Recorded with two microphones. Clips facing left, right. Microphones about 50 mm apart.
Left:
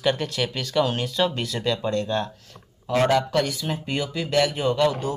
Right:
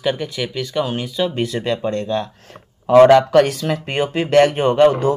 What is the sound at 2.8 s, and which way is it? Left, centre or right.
Speech, right.